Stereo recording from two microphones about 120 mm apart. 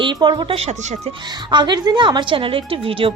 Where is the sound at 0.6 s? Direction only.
65° right (ahead or behind).